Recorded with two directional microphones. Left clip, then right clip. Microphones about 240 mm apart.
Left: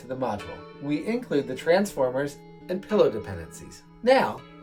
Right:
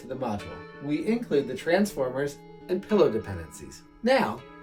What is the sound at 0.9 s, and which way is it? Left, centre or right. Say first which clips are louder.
Speech: even; centre.